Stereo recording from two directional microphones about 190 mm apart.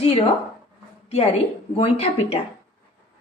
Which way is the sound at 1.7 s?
30° left (ahead or behind).